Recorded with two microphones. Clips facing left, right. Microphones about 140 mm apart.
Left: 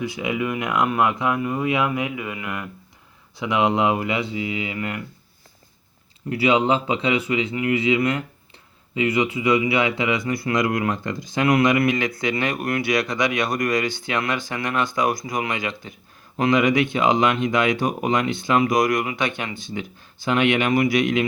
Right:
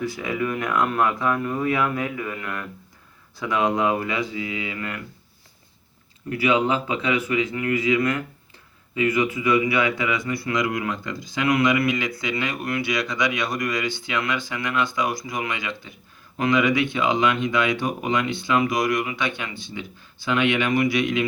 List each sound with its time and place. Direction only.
0.0 s a man's voice: 20° left (ahead or behind)
6.2 s a man's voice: 25° left (ahead or behind)
10.2 s speech: 40° left (ahead or behind)